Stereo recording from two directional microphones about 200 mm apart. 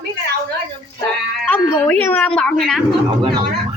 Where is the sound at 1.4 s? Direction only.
5° left (ahead or behind).